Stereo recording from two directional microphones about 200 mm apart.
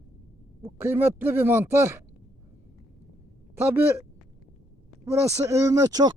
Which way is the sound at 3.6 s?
10° right (ahead or behind).